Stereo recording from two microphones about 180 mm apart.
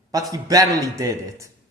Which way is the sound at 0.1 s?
20° right (ahead or behind).